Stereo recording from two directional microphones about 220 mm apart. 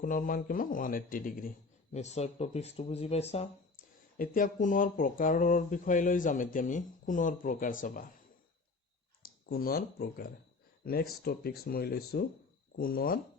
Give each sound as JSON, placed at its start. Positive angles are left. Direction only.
{"t": 0.0, "sound": "speech", "side_deg": 35}
{"t": 9.5, "sound": "speech", "side_deg": 40}